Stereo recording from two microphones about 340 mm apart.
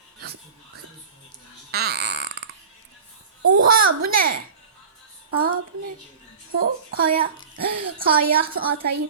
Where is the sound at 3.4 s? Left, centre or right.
Right.